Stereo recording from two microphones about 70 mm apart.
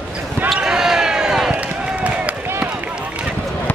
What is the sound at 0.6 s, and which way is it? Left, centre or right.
Basketball bounce, centre.